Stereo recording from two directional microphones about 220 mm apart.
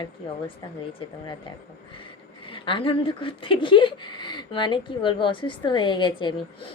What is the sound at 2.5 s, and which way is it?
Speech, 20° left (ahead or behind).